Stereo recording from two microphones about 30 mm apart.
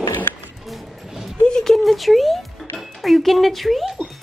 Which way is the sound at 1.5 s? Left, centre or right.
Centre.